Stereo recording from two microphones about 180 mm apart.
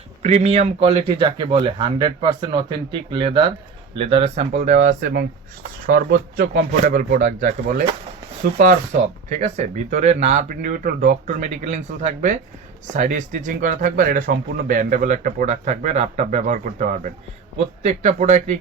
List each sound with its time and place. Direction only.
0.2 s a man's voice: 40° right (ahead or behind)
5.8 s speech: 65° right (ahead or behind)
9.3 s speech: 40° right (ahead or behind)